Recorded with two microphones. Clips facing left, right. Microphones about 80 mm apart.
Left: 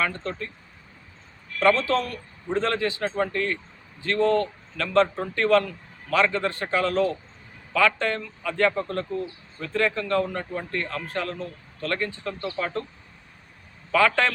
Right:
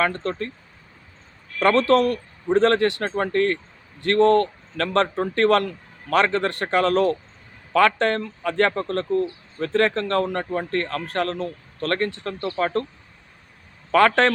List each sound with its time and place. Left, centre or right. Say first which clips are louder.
0.0 s speech: right 5 dB; right
1.5 s speech: right 4 dB; right
4.0 s speech: right 5 dB; right
13.9 s speech: right 4 dB; right